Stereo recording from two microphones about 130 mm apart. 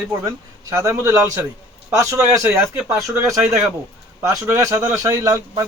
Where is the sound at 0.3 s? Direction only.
25° right (ahead or behind).